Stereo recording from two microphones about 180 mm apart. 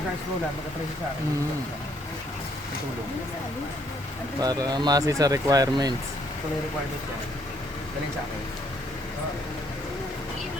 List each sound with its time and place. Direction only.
4.4 s speech: 20° right (ahead or behind)